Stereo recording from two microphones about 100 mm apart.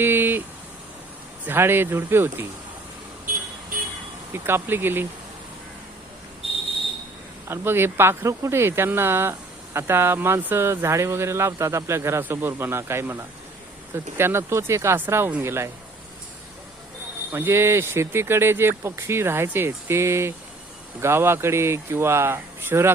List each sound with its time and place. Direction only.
0.0 s a sound: 20° right (ahead or behind)
1.5 s speech: 20° right (ahead or behind)
4.3 s speech: 25° right (ahead or behind)
7.4 s speech: 25° right (ahead or behind)
17.3 s speech: 25° right (ahead or behind)